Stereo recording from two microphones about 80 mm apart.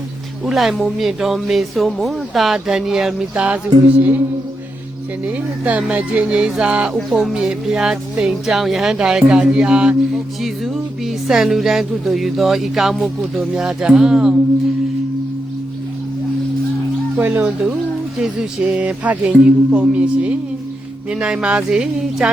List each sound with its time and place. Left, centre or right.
0.4 s speech: centre
3.3 s speech: centre
5.2 s speech: centre
6.9 s speech: centre
17.2 s speech: right